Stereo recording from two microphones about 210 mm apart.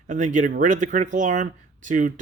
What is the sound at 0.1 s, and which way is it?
Speech, 35° right (ahead or behind).